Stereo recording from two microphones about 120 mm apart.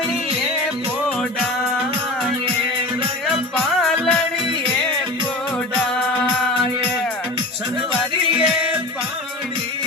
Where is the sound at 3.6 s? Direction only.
5° left (ahead or behind).